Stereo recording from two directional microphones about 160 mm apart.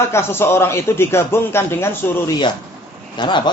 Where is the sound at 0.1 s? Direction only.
15° left (ahead or behind).